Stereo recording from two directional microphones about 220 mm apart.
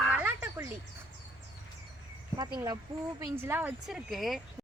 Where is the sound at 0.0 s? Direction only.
5° right (ahead or behind).